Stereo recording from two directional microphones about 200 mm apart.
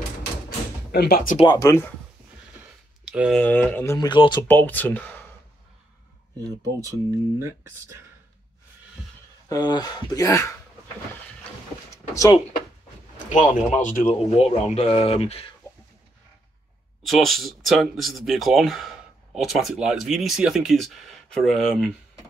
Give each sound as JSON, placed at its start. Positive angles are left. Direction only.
{"t": 0.9, "sound": "speech", "side_deg": 50}
{"t": 1.4, "sound": "speech", "side_deg": 20}
{"t": 3.1, "sound": "speech", "side_deg": 0}
{"t": 4.5, "sound": "speech", "side_deg": 10}
{"t": 6.3, "sound": "speech", "side_deg": -15}
{"t": 9.5, "sound": "speech", "side_deg": 20}
{"t": 11.9, "sound": "drawer open or close", "side_deg": 15}
{"t": 13.3, "sound": "speech", "side_deg": 40}
{"t": 17.0, "sound": "speech", "side_deg": 0}